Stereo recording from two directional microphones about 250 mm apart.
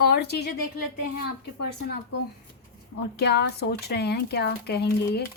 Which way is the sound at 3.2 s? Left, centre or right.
Left.